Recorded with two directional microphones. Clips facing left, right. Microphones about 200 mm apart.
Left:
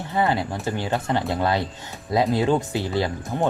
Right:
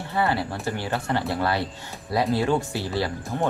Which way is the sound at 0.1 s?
20° left (ahead or behind).